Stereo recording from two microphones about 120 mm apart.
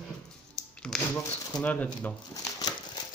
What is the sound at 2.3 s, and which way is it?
Crumpling, 30° left (ahead or behind).